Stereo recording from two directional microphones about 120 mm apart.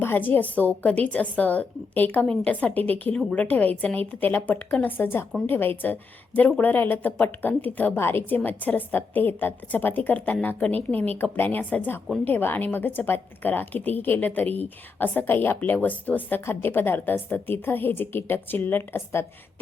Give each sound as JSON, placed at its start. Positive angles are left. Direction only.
{"t": 0.0, "sound": "a woman's voice", "side_deg": 15}